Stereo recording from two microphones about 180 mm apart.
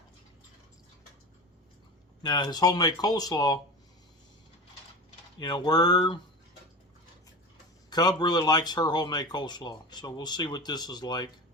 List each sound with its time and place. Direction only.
2.2 s speech: 20° left (ahead or behind)
5.4 s speech: 25° left (ahead or behind)
7.9 s speech: 20° left (ahead or behind)